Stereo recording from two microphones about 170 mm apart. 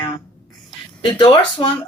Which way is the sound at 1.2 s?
30° left (ahead or behind).